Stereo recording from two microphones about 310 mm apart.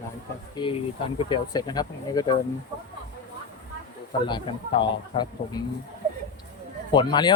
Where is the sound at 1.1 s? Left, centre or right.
Centre.